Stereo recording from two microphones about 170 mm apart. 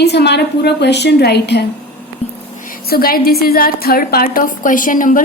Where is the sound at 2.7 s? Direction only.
60° left (ahead or behind).